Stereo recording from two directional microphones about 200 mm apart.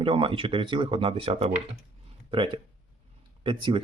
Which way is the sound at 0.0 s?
25° right (ahead or behind).